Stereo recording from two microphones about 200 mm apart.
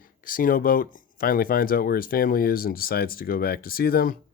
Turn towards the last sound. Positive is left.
turn(degrees=50)  # may be behind; listen again after turning